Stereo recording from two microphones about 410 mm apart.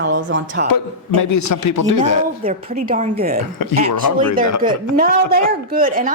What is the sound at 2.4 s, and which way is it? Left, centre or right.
A woman's voice, centre.